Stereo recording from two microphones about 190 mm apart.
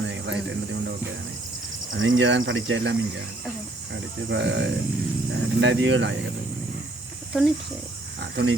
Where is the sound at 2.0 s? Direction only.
85° right.